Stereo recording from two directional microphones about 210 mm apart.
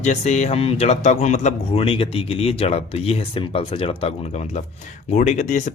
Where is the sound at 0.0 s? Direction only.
35° left (ahead or behind).